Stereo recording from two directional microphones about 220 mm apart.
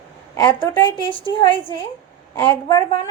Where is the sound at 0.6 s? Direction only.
20° left (ahead or behind).